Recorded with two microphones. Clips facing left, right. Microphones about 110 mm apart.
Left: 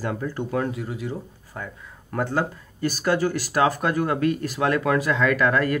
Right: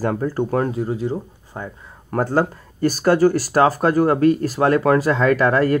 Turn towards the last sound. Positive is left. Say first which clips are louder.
# right 4 dB
turn(degrees=-35)  # may be behind; listen again after turning